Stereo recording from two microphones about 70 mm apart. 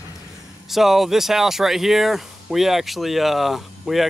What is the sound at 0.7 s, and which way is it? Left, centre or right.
Speech, centre.